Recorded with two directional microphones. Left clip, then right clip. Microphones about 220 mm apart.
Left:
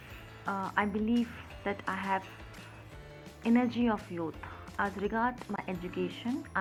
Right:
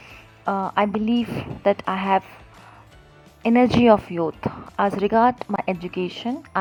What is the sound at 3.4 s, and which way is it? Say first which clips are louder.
Speech: right 13 dB; 50° right (ahead or behind).